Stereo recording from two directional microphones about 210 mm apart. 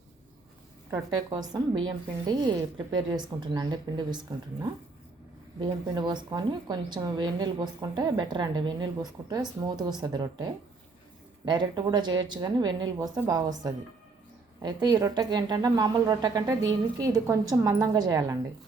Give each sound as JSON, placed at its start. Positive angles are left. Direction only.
{"t": 0.9, "sound": "a woman's voice", "side_deg": -20}
{"t": 5.5, "sound": "a woman's voice", "side_deg": -20}